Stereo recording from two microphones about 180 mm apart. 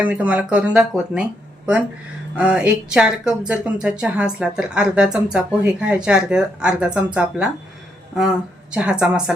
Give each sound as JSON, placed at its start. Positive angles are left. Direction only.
{"t": 0.0, "sound": "speech", "side_deg": -10}